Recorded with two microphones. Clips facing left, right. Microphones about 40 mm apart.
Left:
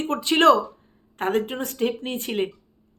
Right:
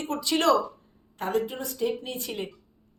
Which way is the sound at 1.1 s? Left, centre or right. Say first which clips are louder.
Left 4 dB; left.